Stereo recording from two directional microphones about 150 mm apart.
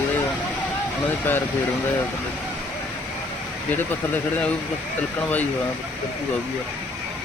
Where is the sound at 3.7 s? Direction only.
10° left (ahead or behind).